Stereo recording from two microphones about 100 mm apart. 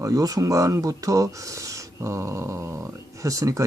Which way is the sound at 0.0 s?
35° right (ahead or behind).